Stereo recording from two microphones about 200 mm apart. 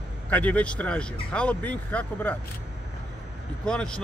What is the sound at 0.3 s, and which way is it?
Speech, 5° left (ahead or behind).